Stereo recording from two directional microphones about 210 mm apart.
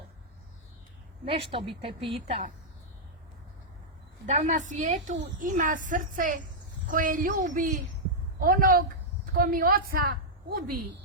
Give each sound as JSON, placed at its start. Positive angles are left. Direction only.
{"t": 1.2, "sound": "speech", "side_deg": -25}
{"t": 4.3, "sound": "a woman's voice", "side_deg": -35}